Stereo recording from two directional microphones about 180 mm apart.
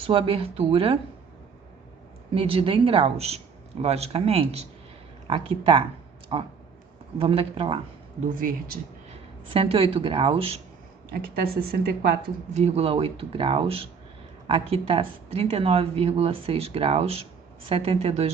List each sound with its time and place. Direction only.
0.0 s speech: 30° right (ahead or behind)
2.3 s speech: 30° right (ahead or behind)
8.3 s speech: 50° right (ahead or behind)
9.0 s speech: 30° right (ahead or behind)
11.1 s speech: 55° right (ahead or behind)
12.5 s speech: 35° right (ahead or behind)